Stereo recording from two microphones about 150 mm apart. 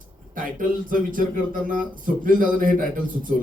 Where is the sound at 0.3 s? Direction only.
65° right (ahead or behind).